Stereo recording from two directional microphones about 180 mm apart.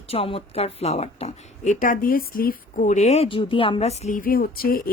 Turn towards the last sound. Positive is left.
turn(degrees=55)  # may be behind; listen again after turning